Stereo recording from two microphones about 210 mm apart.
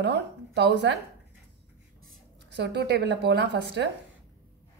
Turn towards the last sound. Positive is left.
turn(degrees=-55)  # may be behind; listen again after turning